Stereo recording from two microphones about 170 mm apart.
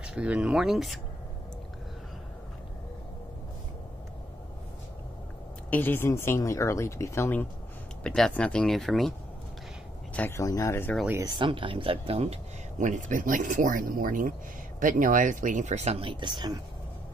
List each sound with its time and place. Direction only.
0.0 s speech: 5° right (ahead or behind)
5.7 s speech: 10° left (ahead or behind)
10.1 s speech: 15° left (ahead or behind)
11.1 s speech: 15° right (ahead or behind)
11.3 s speech: 30° right (ahead or behind)